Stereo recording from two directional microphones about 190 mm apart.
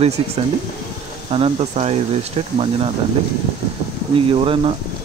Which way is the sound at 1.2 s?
30° right (ahead or behind).